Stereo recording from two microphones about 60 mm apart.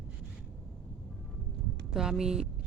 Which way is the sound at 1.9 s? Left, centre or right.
Centre.